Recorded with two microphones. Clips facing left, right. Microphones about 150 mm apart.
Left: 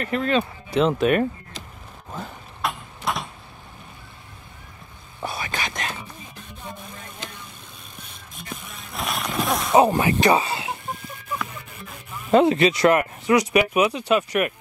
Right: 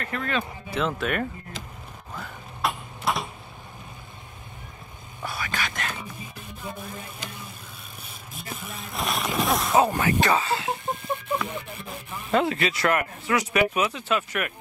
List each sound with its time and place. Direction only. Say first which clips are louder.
0.0 s speech: left 6 dB; 25° left (ahead or behind)
2.6 s a sound: even; centre (ahead or behind)
5.2 s whispering: left 2 dB; 20° left (ahead or behind)
8.0 s a sound: right 1 dB; centre (ahead or behind)
9.8 s speech: left 5 dB; 15° left (ahead or behind)
11.4 s music: right 5 dB; 30° right (ahead or behind)
12.3 s speech: left 7 dB; 20° left (ahead or behind)